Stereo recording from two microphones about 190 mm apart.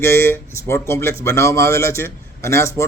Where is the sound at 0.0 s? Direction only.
15° left (ahead or behind).